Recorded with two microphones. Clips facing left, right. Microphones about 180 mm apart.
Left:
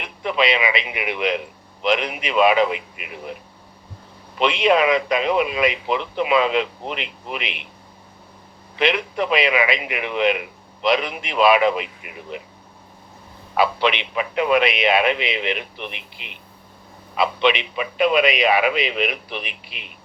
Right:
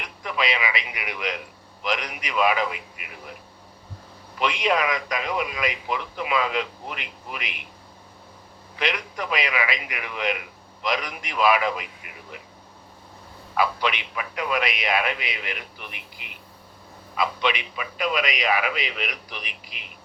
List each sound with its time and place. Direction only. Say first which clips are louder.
0.0 s a man's voice: left 7 dB; 20° left (ahead or behind)
4.4 s a man's voice: left 6 dB; 25° left (ahead or behind)
8.8 s a man's voice: left 8 dB; 25° left (ahead or behind)
13.6 s a man's voice: left 5 dB; 25° left (ahead or behind)